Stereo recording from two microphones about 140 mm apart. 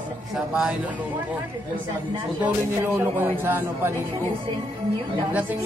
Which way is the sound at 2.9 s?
15° right (ahead or behind).